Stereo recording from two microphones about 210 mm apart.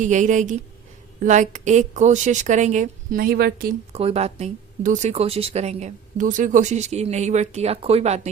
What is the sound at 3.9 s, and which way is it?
Speech, 30° right (ahead or behind).